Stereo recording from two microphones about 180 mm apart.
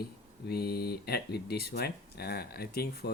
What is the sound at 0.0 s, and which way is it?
Speech, 60° left (ahead or behind).